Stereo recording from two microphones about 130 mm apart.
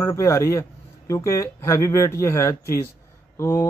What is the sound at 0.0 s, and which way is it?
Speech, 25° left (ahead or behind).